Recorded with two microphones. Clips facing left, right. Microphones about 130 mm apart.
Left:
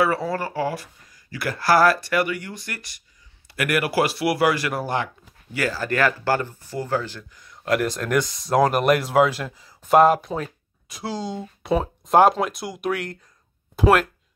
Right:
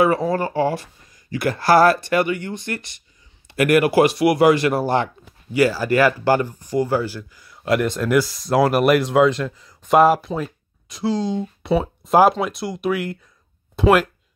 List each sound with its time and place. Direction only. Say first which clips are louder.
0.0 s speech: right 4 dB; 20° right (ahead or behind)
5.5 s speech: right 7 dB; 10° right (ahead or behind)